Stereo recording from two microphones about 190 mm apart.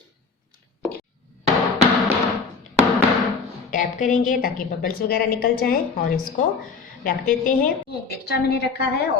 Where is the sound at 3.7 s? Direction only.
45° left (ahead or behind).